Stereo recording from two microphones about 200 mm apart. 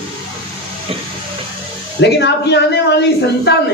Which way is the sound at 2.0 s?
60° left (ahead or behind).